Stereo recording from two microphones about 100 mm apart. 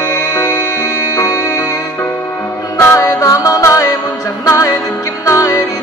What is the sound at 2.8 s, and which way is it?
Music, 30° left (ahead or behind).